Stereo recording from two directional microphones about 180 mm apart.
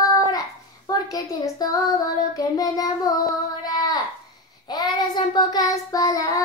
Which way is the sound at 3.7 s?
20° left (ahead or behind).